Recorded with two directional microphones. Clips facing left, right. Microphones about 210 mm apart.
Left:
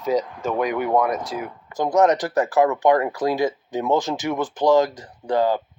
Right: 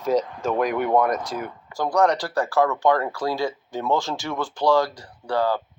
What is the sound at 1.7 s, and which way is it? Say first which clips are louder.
Speech: left 3 dB; 20° left (ahead or behind).